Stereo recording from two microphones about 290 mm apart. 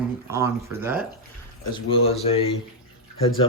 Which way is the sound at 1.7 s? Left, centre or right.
Centre.